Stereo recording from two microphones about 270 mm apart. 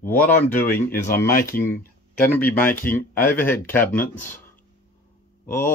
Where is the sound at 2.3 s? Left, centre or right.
Centre.